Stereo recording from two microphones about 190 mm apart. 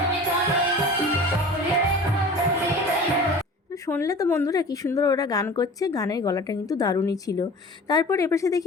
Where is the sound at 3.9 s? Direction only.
15° left (ahead or behind).